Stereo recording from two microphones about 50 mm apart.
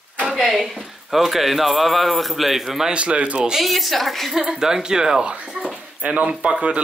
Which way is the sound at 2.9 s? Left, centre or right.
Right.